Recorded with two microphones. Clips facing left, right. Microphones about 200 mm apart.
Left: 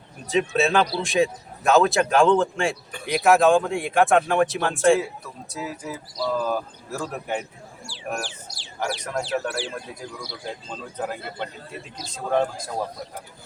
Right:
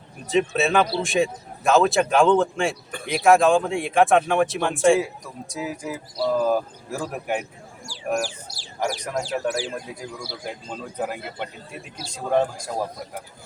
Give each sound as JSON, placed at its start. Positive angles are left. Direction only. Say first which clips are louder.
{"t": 0.3, "sound": "speech", "louder": "even", "side_deg": 0}
{"t": 4.9, "sound": "speech", "louder": "right 2 dB", "side_deg": -15}
{"t": 7.9, "sound": "speech", "louder": "right 6 dB", "side_deg": -40}
{"t": 10.4, "sound": "speech", "louder": "even", "side_deg": -10}